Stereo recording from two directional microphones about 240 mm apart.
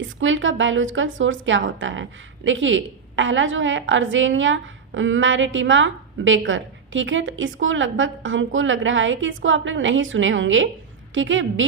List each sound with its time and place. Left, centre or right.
0.0 s a woman's voice: right